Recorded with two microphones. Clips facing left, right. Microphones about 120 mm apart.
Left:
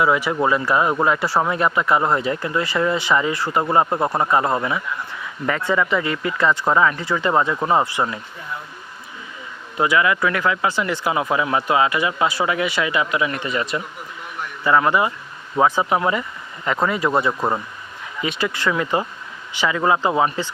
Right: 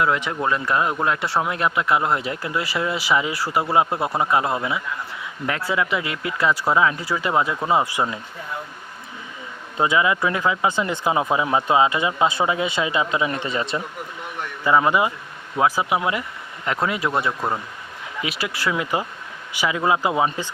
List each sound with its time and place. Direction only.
0.0 s speech: 5° left (ahead or behind); by 8.0 s 10° right (ahead or behind)
9.7 s speech: 20° right (ahead or behind)
14.6 s speech: 15° right (ahead or behind)
15.6 s speech: 5° right (ahead or behind)
18.2 s speech: 5° right (ahead or behind)